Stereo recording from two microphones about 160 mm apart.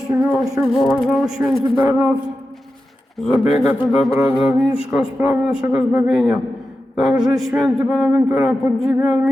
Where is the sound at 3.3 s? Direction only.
40° left (ahead or behind).